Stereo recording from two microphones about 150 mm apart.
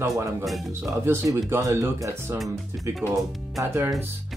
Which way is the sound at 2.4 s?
Centre (ahead or behind).